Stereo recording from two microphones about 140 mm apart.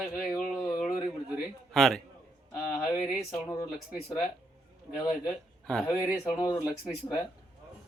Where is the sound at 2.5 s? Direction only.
25° left (ahead or behind).